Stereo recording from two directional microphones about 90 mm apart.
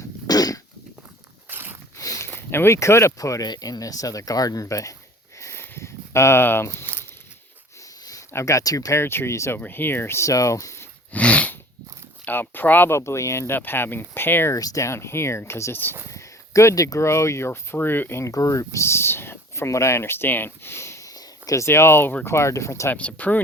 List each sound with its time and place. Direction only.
0.3 s cough: 45° left (ahead or behind)
1.5 s a sound: 25° right (ahead or behind)
2.0 s a sound: 35° left (ahead or behind)
2.3 s speech: 25° left (ahead or behind)
5.4 s a sound: 30° left (ahead or behind)
8.3 s speech: 35° left (ahead or behind)
11.1 s dog: 15° left (ahead or behind)
12.2 s speech: 20° left (ahead or behind)
13.0 s speech: 35° left (ahead or behind)
14.5 s speech: 40° left (ahead or behind)
18.3 s speech: 40° left (ahead or behind)
23.0 s speech: 15° left (ahead or behind)